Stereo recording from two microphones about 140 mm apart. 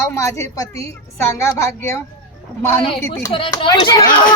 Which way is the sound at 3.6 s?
30° left (ahead or behind).